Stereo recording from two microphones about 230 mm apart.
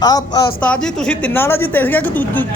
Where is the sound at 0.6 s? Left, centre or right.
Centre.